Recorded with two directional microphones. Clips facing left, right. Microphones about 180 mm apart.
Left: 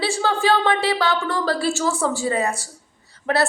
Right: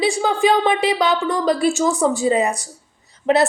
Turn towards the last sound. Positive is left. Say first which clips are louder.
# right 5 dB
turn(degrees=-20)  # may be behind; listen again after turning